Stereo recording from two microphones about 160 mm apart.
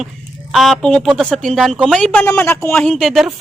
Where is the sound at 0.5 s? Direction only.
Centre (ahead or behind).